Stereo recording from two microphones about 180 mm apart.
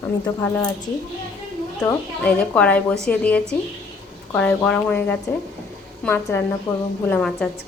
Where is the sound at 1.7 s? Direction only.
5° left (ahead or behind).